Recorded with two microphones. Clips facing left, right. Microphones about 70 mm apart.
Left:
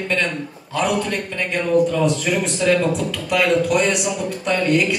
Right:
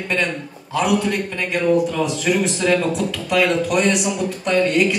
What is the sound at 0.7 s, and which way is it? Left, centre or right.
Speech, centre.